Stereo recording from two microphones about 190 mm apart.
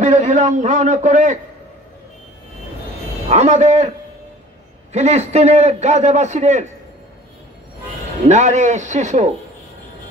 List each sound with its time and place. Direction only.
0.0 s a man's voice: 40° right (ahead or behind)
3.3 s a man's voice: 35° right (ahead or behind)
4.9 s a man's voice: 35° right (ahead or behind)
8.3 s a man's voice: 40° right (ahead or behind)